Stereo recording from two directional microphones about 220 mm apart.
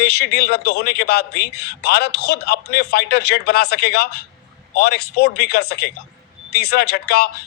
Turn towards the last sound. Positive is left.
turn(degrees=45)  # may be behind; listen again after turning